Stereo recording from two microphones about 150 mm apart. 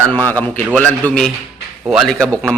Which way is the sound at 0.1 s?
10° left (ahead or behind).